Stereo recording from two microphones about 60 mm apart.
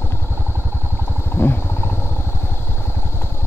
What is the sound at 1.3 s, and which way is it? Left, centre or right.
Wild animals, left.